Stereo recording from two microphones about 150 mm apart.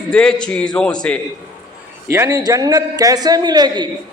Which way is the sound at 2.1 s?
20° right (ahead or behind).